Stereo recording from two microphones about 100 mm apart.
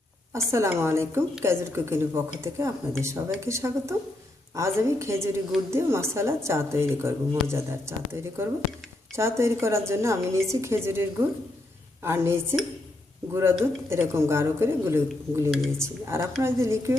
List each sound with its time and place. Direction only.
0.5 s a woman's voice: 25° right (ahead or behind)
15.4 s speech: centre (ahead or behind)
15.8 s a woman's voice: 25° right (ahead or behind)